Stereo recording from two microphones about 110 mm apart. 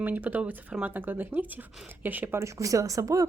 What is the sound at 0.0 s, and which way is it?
Speech, 15° right (ahead or behind).